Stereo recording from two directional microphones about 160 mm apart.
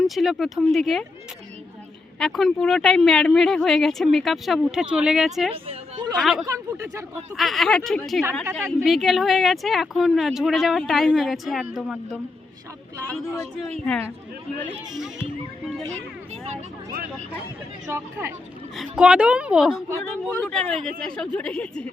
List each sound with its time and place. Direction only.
0.0 s speech: centre (ahead or behind)
2.1 s speech: centre (ahead or behind)
5.6 s a woman's voice: 25° right (ahead or behind)
6.1 s speech: centre (ahead or behind)
6.4 s speech: 20° right (ahead or behind)
7.3 s speech: centre (ahead or behind)
14.9 s speech: 5° right (ahead or behind)
17.8 s speech: 15° right (ahead or behind)
18.8 s speech: 5° right (ahead or behind)